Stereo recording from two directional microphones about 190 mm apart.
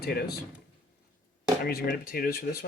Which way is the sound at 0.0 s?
55° left (ahead or behind).